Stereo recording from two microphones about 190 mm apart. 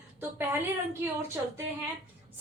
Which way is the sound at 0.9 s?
15° right (ahead or behind).